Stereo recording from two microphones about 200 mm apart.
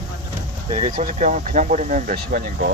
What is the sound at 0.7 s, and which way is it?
Speech, 35° right (ahead or behind).